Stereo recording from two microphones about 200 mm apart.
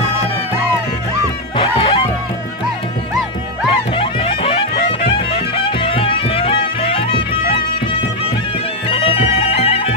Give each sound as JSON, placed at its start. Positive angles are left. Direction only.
{"t": 1.6, "sound": "music", "side_deg": 30}
{"t": 3.9, "sound": "music", "side_deg": 25}
{"t": 8.8, "sound": "music", "side_deg": 30}